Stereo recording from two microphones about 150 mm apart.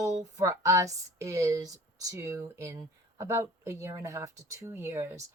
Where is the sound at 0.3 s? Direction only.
20° right (ahead or behind).